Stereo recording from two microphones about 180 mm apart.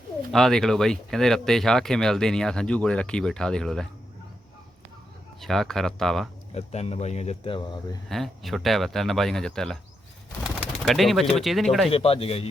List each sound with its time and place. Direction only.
0.3 s speech: centre (ahead or behind)
5.4 s speech: centre (ahead or behind)
6.5 s speech: 35° left (ahead or behind)
8.1 s speech: centre (ahead or behind)
11.9 s speech: 30° left (ahead or behind)